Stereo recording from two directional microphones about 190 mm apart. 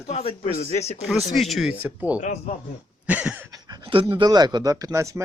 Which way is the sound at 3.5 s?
20° right (ahead or behind).